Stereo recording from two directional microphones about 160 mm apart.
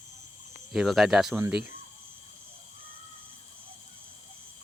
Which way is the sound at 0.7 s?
Centre (ahead or behind).